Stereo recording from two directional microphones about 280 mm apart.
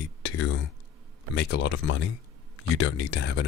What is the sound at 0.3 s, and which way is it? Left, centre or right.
Speech, left.